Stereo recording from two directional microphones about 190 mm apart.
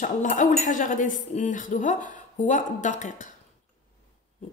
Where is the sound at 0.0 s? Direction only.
40° left (ahead or behind).